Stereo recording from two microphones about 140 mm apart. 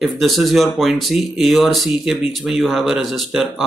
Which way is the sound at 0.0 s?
Centre (ahead or behind).